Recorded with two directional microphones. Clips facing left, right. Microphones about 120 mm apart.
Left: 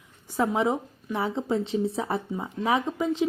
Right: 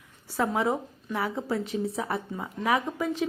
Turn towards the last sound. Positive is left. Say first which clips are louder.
# left 3 dB
turn(degrees=20)  # may be behind; listen again after turning